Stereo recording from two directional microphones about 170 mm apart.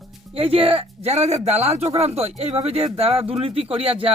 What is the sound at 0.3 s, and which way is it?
Speech, 35° right (ahead or behind).